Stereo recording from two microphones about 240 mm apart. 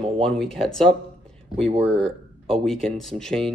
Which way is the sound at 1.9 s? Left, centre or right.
Right.